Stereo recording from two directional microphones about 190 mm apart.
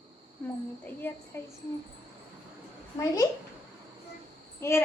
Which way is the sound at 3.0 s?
15° left (ahead or behind).